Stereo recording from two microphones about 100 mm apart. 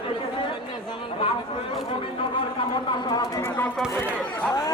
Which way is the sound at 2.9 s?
50° left (ahead or behind).